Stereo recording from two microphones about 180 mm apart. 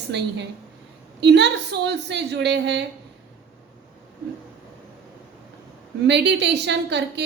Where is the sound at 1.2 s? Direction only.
70° right (ahead or behind).